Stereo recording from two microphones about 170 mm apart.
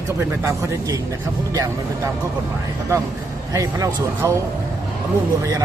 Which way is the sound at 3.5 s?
20° right (ahead or behind).